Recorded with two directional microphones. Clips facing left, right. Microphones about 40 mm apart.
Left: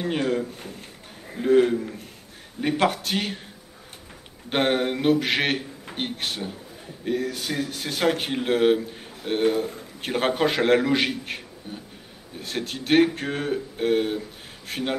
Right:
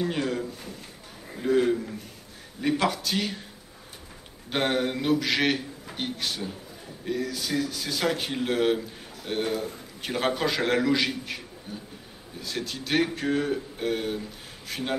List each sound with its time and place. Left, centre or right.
0.0 s a man's voice: left
1.7 s speech: centre
2.6 s a man's voice: left
4.5 s a man's voice: left